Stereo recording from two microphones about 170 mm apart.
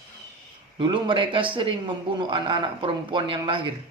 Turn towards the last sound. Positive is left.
turn(degrees=-30)  # may be behind; listen again after turning